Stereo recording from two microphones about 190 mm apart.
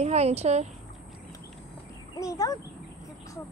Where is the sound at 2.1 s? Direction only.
20° left (ahead or behind).